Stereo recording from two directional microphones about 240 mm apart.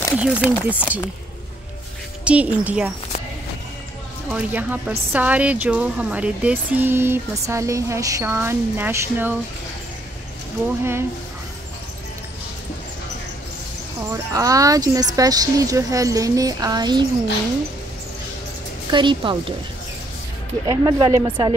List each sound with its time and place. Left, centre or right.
0.2 s speech: centre
2.2 s speech: centre
4.3 s speech: centre
10.8 s speech: centre
14.1 s speech: centre
18.9 s a woman's voice: centre
20.6 s speech: centre